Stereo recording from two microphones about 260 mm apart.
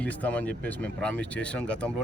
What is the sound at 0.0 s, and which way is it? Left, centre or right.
Speech, centre.